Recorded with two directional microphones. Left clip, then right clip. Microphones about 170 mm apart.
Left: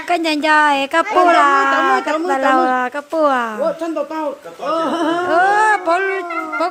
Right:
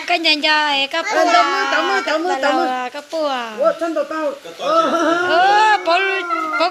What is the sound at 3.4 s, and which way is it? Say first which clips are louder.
Speech: left 2 dB; 35° left (ahead or behind).